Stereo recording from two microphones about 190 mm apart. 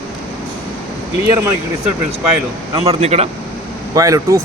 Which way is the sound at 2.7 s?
30° right (ahead or behind).